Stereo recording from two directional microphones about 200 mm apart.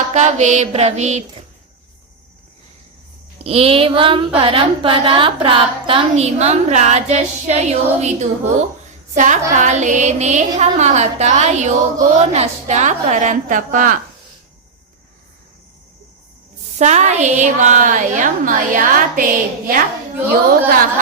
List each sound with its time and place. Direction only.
0.1 s a woman's voice: 35° right (ahead or behind)
3.4 s child singing: 30° right (ahead or behind)
4.4 s a woman's voice: 25° right (ahead or behind)
16.7 s a woman's voice: 35° right (ahead or behind)